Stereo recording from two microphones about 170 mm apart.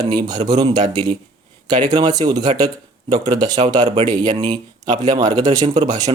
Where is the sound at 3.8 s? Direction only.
35° right (ahead or behind).